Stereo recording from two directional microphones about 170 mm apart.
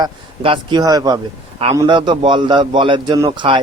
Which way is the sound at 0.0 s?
30° right (ahead or behind).